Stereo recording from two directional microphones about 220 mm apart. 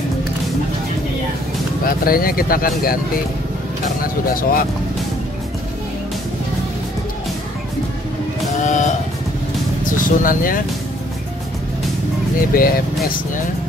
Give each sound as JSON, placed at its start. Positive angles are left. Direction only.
{"t": 1.9, "sound": "speech", "side_deg": 40}
{"t": 4.0, "sound": "speech", "side_deg": 40}
{"t": 8.6, "sound": "music", "side_deg": 35}
{"t": 9.8, "sound": "speech", "side_deg": 35}
{"t": 12.4, "sound": "speech", "side_deg": 40}